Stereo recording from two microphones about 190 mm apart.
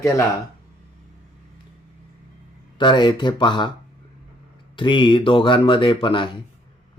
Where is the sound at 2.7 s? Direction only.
25° left (ahead or behind).